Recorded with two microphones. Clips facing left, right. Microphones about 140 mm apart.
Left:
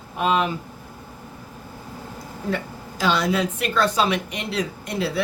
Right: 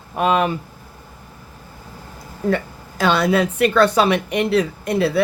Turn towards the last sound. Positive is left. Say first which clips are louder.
# right 7 dB
turn(degrees=-60)  # may be behind; listen again after turning